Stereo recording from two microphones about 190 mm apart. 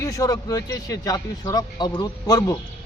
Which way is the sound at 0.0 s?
15° left (ahead or behind).